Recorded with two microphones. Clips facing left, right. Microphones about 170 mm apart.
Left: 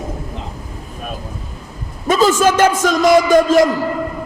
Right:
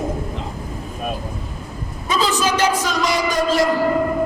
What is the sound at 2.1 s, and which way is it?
A man's voice, 50° left (ahead or behind).